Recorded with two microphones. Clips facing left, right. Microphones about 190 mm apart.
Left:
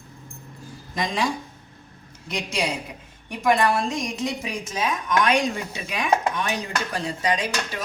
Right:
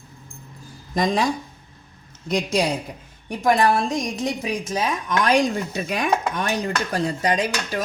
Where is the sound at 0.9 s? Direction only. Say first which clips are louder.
Right 6 dB; 40° right (ahead or behind).